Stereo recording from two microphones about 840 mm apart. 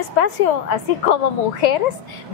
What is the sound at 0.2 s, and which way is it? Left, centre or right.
Speech, left.